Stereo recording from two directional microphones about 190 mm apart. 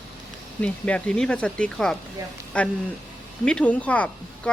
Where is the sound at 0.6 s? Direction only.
5° left (ahead or behind).